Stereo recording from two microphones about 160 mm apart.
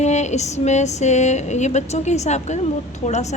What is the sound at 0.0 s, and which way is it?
A woman's voice, 45° left (ahead or behind).